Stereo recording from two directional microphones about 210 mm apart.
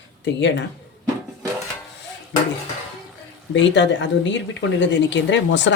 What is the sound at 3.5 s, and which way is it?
Speech, 60° left (ahead or behind).